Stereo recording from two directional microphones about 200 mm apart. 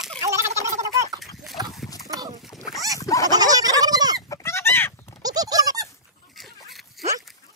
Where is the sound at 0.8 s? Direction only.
15° right (ahead or behind).